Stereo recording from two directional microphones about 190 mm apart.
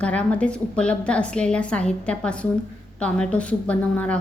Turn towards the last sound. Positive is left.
turn(degrees=5)  # may be behind; listen again after turning